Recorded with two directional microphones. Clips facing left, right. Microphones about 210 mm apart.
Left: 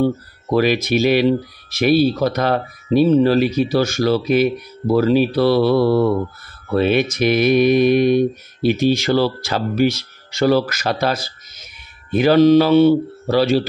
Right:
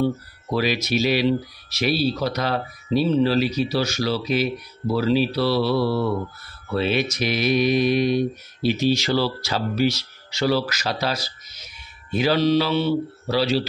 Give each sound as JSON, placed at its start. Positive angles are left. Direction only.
{"t": 0.0, "sound": "mantra", "side_deg": 55}